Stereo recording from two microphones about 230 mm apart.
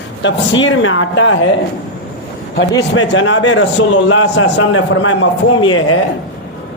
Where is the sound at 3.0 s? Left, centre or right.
Left.